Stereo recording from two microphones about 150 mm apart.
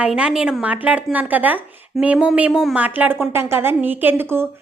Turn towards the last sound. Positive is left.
turn(degrees=-15)  # may be behind; listen again after turning